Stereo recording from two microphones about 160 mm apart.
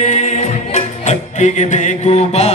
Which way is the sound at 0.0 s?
45° left (ahead or behind).